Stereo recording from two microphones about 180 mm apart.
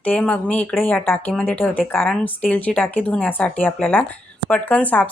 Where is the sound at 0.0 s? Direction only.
5° left (ahead or behind).